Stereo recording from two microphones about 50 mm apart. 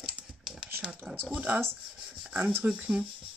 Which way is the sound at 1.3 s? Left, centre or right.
Right.